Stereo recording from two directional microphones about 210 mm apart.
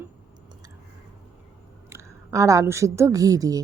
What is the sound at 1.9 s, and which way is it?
A woman's voice, 15° right (ahead or behind).